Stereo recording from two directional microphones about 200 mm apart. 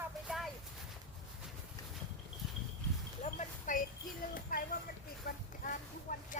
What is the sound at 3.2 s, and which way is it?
Clip-clop, 40° left (ahead or behind).